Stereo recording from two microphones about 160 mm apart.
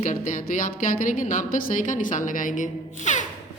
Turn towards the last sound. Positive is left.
turn(degrees=50)  # may be behind; listen again after turning